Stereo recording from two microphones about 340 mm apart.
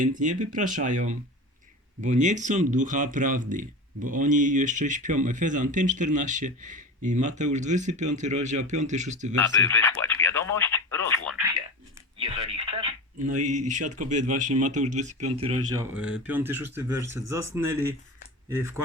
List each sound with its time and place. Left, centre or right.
0.0 s speech: right
9.3 s speech: centre
12.1 s speech: centre
15.7 s speech: centre